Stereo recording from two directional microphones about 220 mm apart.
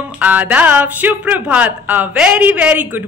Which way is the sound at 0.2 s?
5° right (ahead or behind).